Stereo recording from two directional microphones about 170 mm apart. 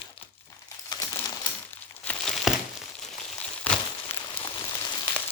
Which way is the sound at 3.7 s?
10° left (ahead or behind).